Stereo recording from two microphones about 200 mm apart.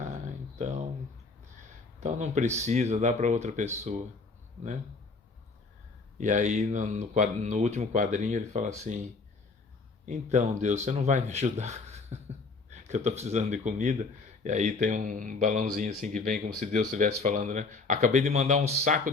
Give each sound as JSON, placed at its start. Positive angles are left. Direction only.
{"t": 2.0, "sound": "speech", "side_deg": -35}
{"t": 6.1, "sound": "speech", "side_deg": -40}
{"t": 10.1, "sound": "speech", "side_deg": -35}